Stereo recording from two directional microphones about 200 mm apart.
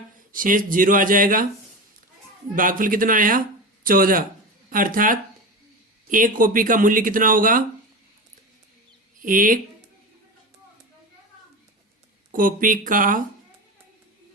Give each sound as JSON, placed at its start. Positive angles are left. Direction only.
{"t": 0.3, "sound": "speech", "side_deg": -45}
{"t": 2.6, "sound": "speech", "side_deg": -45}
{"t": 9.2, "sound": "speech", "side_deg": -45}
{"t": 12.3, "sound": "speech", "side_deg": -45}